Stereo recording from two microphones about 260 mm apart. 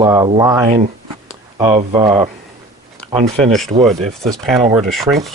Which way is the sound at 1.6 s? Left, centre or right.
Centre.